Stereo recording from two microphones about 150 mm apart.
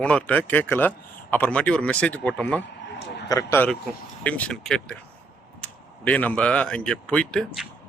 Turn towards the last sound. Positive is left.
turn(degrees=0)  # may be behind; listen again after turning